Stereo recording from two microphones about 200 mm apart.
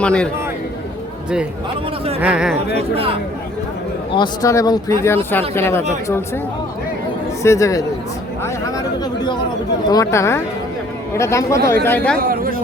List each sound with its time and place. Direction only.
0.0 s a man's voice: 5° left (ahead or behind)
2.2 s speech: 5° right (ahead or behind)
2.7 s speech: 30° right (ahead or behind)
4.1 s speech: 20° left (ahead or behind)
7.4 s speech: 15° left (ahead or behind)
9.9 s speech: 15° left (ahead or behind)
12.3 s a sound: 45° right (ahead or behind)